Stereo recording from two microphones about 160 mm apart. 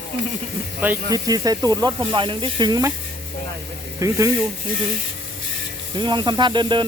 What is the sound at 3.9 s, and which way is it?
Speech, 20° right (ahead or behind).